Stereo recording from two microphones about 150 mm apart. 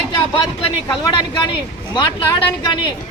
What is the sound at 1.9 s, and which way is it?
Speech, 35° left (ahead or behind).